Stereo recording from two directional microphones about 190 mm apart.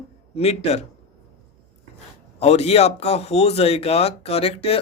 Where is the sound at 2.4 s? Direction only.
35° left (ahead or behind).